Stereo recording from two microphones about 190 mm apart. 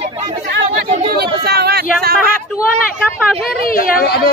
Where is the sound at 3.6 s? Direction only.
50° left (ahead or behind).